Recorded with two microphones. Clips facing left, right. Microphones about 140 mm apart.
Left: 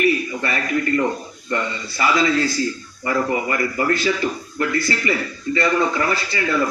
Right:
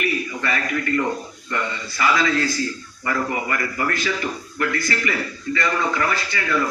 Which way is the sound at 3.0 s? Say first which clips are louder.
Left 3 dB; 30° left (ahead or behind).